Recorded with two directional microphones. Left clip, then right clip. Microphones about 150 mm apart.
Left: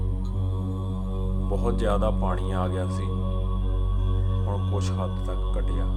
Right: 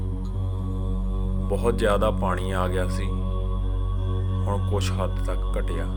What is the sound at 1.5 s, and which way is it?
Speech, 15° right (ahead or behind).